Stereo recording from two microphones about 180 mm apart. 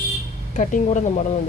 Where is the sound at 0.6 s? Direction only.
45° left (ahead or behind).